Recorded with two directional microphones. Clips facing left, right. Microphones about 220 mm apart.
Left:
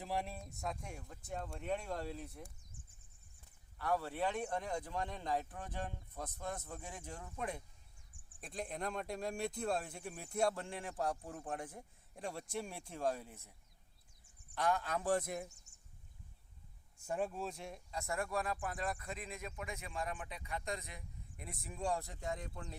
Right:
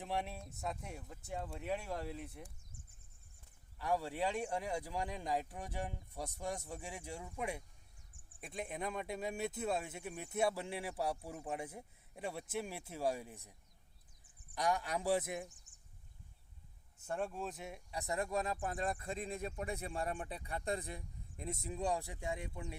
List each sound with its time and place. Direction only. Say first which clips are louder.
0.0 s speech: even; centre (ahead or behind)
3.8 s speech: even; 15° right (ahead or behind)
14.5 s speech: even; 15° right (ahead or behind)
17.1 s speech: left 1 dB; 5° left (ahead or behind)
17.9 s speech: right 1 dB; 20° right (ahead or behind)